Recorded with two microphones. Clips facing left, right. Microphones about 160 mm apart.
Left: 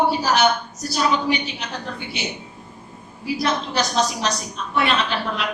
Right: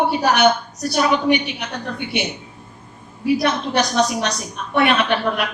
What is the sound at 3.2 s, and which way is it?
A woman's voice, 65° right (ahead or behind).